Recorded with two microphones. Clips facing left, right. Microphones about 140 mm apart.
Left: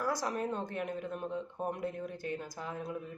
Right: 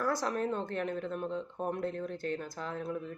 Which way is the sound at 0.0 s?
15° left (ahead or behind).